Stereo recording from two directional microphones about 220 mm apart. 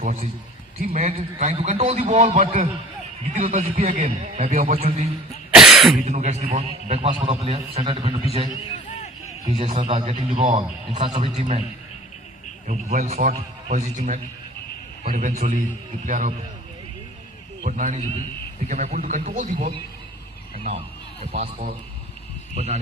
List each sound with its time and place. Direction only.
0.0 s a man's voice: 35° right (ahead or behind)
5.5 s cough: centre (ahead or behind)
6.1 s a man's voice: 30° right (ahead or behind)
9.6 s a man's voice: 30° right (ahead or behind)
12.6 s a man's voice: 40° right (ahead or behind)
17.6 s a man's voice: 35° right (ahead or behind)
21.3 s a man's voice: 35° right (ahead or behind)